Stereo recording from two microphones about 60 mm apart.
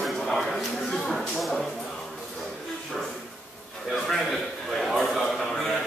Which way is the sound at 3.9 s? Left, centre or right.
Centre.